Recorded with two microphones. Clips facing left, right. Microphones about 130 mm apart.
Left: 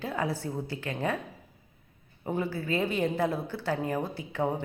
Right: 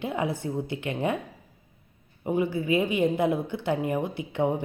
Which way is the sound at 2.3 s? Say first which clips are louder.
Right 5 dB; 15° right (ahead or behind).